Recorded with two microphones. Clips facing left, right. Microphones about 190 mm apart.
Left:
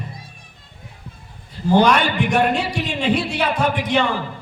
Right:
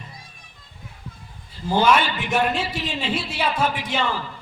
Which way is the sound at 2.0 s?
55° left (ahead or behind).